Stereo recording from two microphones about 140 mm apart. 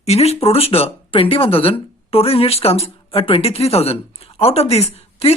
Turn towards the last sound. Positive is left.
turn(degrees=45)  # may be behind; listen again after turning